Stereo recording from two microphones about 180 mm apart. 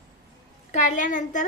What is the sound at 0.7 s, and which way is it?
Speech, 40° left (ahead or behind).